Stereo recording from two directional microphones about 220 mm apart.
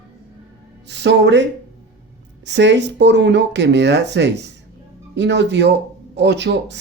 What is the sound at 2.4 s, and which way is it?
Speech, 55° right (ahead or behind).